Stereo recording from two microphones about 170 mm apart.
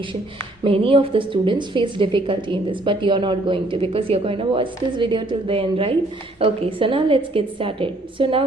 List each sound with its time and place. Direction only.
0.6 s a woman's voice: 30° right (ahead or behind)